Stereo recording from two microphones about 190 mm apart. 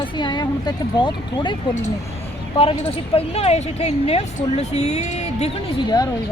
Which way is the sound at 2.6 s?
30° left (ahead or behind).